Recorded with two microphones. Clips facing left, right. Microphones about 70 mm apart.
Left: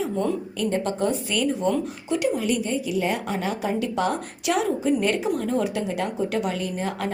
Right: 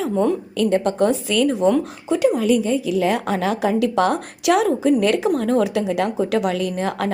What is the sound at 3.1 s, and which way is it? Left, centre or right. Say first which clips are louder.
A woman's voice: right 6 dB; right.